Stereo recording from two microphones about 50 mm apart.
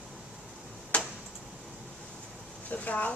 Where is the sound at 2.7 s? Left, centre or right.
Left.